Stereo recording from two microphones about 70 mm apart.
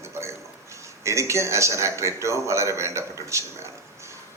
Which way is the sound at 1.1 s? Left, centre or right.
Right.